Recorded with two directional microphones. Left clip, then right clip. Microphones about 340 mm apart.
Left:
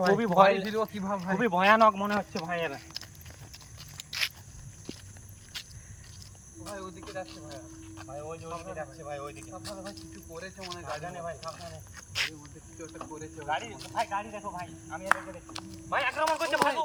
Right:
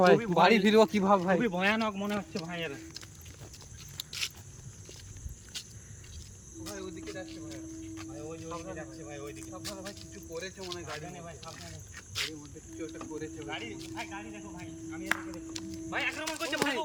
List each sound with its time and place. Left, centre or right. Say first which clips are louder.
0.2 s speech: left 5 dB; centre
0.4 s a man's voice: right 3 dB; right
1.4 s speech: left 8 dB; centre
5.5 s walk: left 1 dB; centre
6.7 s speech: left 1 dB; centre
9.5 s speech: left 1 dB; centre
13.4 s speech: left 6 dB; centre